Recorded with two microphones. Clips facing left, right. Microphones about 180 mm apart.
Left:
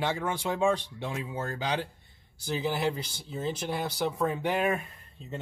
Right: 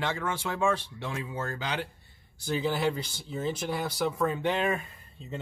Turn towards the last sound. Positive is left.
turn(degrees=5)  # may be behind; listen again after turning